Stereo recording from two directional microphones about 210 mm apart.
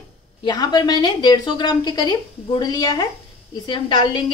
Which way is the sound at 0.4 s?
20° left (ahead or behind).